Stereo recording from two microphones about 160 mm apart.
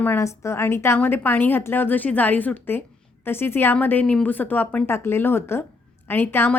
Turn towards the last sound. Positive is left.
turn(degrees=15)  # may be behind; listen again after turning